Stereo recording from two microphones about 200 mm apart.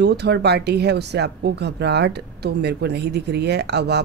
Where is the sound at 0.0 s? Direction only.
55° right (ahead or behind).